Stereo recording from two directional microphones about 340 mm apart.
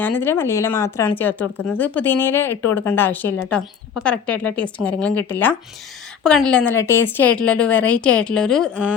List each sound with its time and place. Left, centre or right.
0.0 s a woman's voice: centre